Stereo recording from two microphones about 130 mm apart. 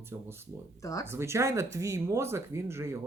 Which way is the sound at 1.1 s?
20° right (ahead or behind).